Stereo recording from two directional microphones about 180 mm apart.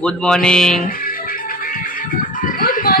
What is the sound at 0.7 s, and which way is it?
Music, 50° left (ahead or behind).